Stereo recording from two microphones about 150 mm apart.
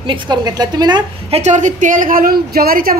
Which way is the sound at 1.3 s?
55° right (ahead or behind).